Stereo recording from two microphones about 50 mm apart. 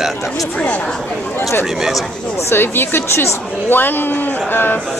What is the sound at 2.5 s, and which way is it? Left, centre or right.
Speech, left.